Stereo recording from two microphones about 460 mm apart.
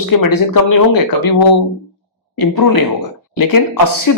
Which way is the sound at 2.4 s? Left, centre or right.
Left.